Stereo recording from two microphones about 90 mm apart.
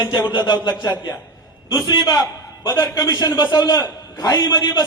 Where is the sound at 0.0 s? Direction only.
50° left (ahead or behind).